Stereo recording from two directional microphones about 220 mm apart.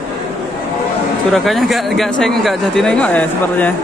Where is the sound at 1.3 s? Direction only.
Centre (ahead or behind).